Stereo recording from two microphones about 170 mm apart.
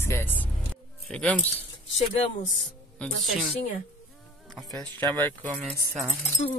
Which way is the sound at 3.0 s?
5° left (ahead or behind).